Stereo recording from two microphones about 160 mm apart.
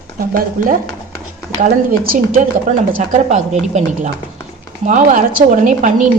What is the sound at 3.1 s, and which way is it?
Speech, 45° right (ahead or behind).